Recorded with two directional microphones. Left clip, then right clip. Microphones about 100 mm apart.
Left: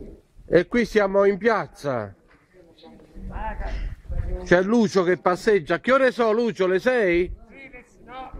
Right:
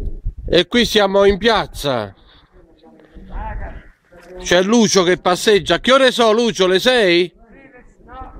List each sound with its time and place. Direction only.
0.5 s a man's voice: 15° right (ahead or behind)
4.5 s speech: 5° right (ahead or behind); by 7.3 s 25° right (ahead or behind)